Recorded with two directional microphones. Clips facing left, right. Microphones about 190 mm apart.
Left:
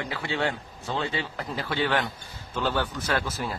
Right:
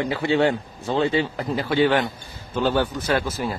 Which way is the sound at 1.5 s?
15° right (ahead or behind).